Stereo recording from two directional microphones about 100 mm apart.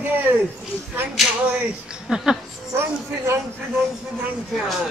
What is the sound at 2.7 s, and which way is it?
Speech, 25° right (ahead or behind).